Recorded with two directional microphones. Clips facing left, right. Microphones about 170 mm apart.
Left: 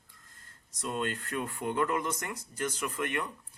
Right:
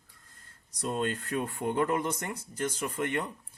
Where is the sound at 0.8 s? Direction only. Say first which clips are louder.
Right 3 dB; 35° right (ahead or behind).